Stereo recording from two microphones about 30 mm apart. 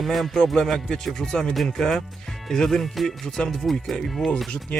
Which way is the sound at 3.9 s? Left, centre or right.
Left.